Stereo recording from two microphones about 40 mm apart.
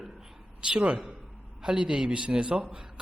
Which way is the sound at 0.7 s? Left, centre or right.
Right.